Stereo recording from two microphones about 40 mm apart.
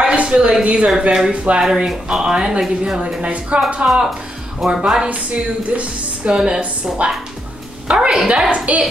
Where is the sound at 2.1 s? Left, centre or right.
Centre.